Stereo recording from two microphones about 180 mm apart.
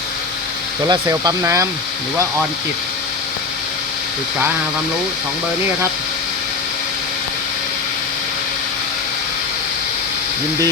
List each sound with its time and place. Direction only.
0.9 s speech: 20° right (ahead or behind)